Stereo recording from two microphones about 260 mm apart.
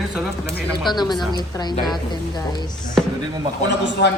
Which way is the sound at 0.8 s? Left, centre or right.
Centre.